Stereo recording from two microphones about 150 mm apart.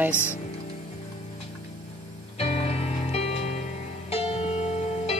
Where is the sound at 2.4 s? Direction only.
45° left (ahead or behind).